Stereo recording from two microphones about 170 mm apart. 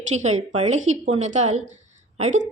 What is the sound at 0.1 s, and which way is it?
A woman's voice, 40° right (ahead or behind).